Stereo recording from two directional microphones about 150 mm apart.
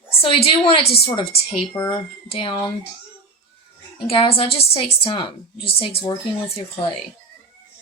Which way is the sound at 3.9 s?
35° left (ahead or behind).